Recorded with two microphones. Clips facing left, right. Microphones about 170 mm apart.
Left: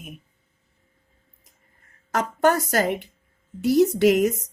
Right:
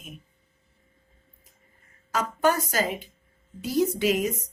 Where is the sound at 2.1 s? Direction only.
70° left (ahead or behind).